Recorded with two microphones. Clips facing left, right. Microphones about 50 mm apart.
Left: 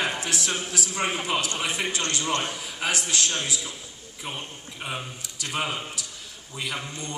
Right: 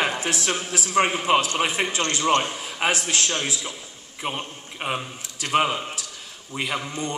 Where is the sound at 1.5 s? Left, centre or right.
Right.